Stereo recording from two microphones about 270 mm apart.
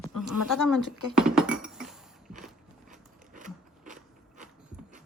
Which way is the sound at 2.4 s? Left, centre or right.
Centre.